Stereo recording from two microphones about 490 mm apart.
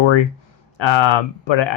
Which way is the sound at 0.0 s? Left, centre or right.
Left.